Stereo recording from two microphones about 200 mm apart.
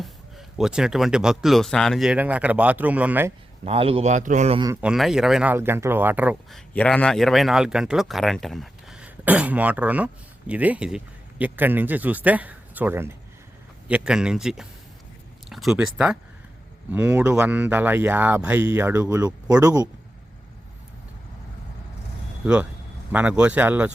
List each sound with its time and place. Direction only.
0.0 s speech: centre (ahead or behind)
3.6 s a man's voice: 30° right (ahead or behind)
4.8 s speech: 5° right (ahead or behind)
6.7 s speech: 5° left (ahead or behind); by 19.9 s 15° right (ahead or behind)
23.1 s speech: 5° right (ahead or behind)